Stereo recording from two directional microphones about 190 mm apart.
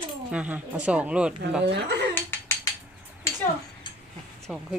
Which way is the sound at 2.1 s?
10° left (ahead or behind).